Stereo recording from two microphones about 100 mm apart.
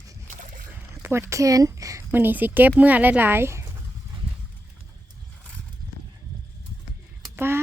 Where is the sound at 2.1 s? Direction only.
20° right (ahead or behind).